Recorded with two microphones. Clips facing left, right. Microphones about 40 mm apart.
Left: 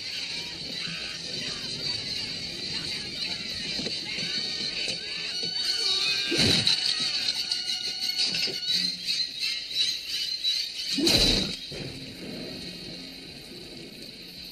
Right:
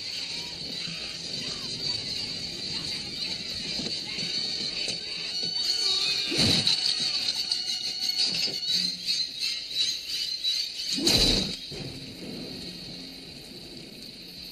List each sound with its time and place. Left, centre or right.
0.8 s music: centre